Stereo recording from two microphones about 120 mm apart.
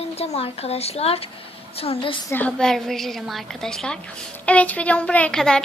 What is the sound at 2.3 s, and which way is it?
A woman's voice, 10° left (ahead or behind).